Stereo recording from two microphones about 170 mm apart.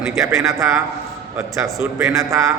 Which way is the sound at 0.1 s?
15° right (ahead or behind).